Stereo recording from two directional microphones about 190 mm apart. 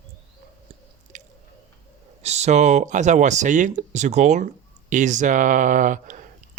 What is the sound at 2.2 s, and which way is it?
Speech, 35° right (ahead or behind).